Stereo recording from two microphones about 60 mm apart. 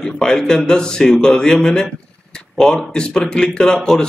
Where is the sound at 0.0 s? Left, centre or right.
Centre.